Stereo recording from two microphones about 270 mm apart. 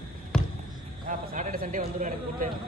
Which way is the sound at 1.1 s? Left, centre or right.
Right.